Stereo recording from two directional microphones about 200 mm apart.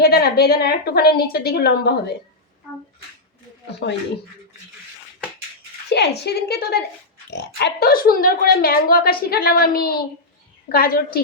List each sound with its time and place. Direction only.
0.0 s a woman's voice: 50° left (ahead or behind)
3.7 s speech: 55° left (ahead or behind)
5.9 s a woman's voice: 55° left (ahead or behind)